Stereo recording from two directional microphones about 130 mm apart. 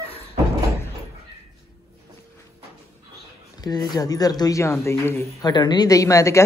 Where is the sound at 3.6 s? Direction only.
30° left (ahead or behind).